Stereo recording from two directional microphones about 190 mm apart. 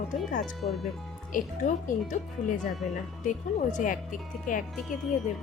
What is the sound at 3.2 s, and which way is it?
A woman's voice, 40° left (ahead or behind).